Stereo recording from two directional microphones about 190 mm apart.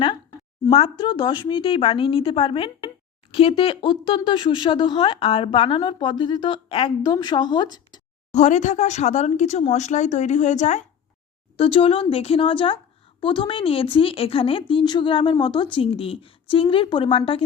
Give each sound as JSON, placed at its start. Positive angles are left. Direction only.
{"t": 0.7, "sound": "speech", "side_deg": 25}
{"t": 8.3, "sound": "speech", "side_deg": 40}